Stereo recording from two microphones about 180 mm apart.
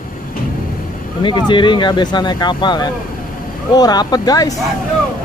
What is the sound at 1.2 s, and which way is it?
Speech, 25° left (ahead or behind).